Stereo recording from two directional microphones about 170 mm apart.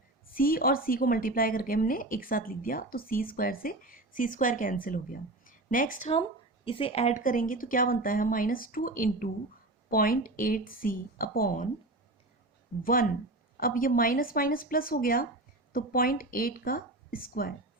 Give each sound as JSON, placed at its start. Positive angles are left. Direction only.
{"t": 0.3, "sound": "a woman's voice", "side_deg": 55}
{"t": 6.7, "sound": "a woman's voice", "side_deg": 30}
{"t": 12.8, "sound": "a woman's voice", "side_deg": 55}